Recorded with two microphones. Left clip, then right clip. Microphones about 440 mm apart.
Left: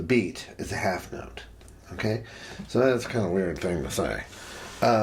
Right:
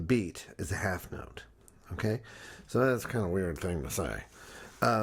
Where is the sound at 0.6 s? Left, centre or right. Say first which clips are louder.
Left 6 dB; right.